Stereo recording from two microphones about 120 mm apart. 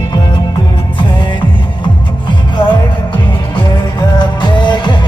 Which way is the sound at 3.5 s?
40° left (ahead or behind).